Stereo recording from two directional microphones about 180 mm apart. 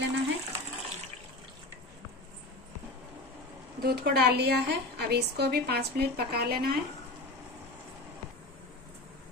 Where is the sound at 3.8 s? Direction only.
60° right (ahead or behind).